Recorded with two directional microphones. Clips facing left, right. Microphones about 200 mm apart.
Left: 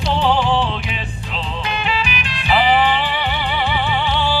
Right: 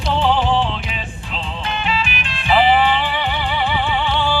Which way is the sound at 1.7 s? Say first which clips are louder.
Right 1 dB; 40° left (ahead or behind).